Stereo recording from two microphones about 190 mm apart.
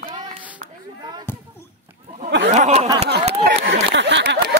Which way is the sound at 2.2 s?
75° right (ahead or behind).